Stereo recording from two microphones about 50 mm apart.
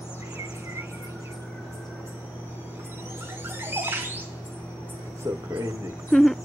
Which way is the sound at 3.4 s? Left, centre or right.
Right.